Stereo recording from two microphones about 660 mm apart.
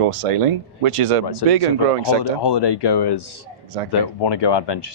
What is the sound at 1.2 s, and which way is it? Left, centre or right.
Speech, left.